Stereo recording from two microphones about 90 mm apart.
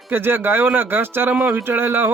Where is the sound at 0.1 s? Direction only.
25° right (ahead or behind).